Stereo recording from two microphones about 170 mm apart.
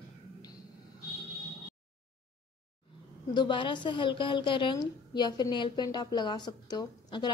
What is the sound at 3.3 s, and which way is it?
A woman's voice, 25° left (ahead or behind).